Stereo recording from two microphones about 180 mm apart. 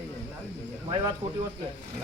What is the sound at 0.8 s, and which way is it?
Speech, 25° right (ahead or behind).